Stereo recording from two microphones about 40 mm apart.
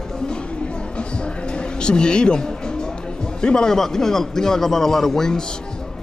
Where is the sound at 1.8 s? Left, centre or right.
Left.